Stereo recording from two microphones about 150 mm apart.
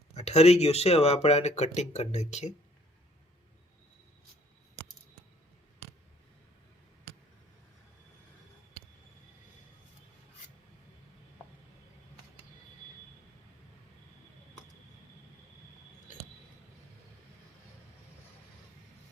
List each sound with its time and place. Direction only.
0.1 s speech: 45° left (ahead or behind)